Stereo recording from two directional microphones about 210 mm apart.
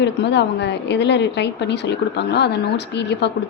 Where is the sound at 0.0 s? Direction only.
55° left (ahead or behind).